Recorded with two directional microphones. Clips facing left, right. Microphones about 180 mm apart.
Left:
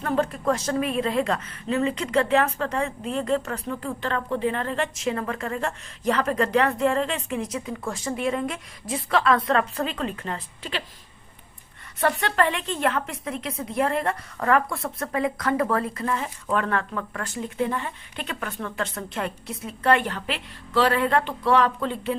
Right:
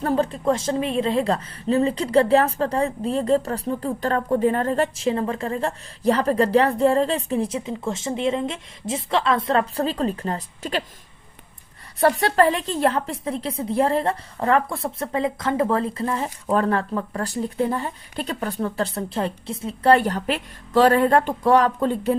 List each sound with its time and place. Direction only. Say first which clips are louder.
0.0 s a woman's voice: right 3 dB; 30° right (ahead or behind)
11.9 s a woman's voice: right 5 dB; 35° right (ahead or behind)